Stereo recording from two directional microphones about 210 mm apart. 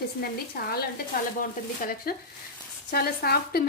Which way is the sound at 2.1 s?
45° left (ahead or behind).